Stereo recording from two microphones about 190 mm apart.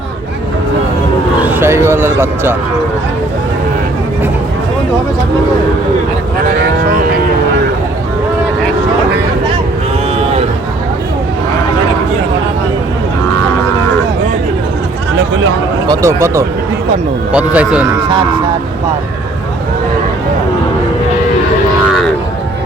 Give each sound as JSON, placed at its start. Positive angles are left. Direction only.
{"t": 1.4, "sound": "vehicle", "side_deg": -10}
{"t": 15.9, "sound": "speech", "side_deg": -15}